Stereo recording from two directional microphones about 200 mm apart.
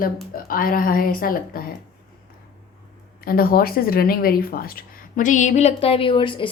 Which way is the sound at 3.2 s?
50° left (ahead or behind).